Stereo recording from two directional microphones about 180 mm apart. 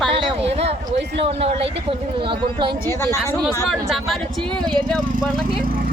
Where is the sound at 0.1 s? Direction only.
30° right (ahead or behind).